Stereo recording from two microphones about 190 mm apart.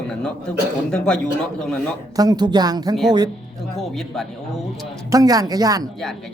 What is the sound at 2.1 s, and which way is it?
Speech, 20° right (ahead or behind).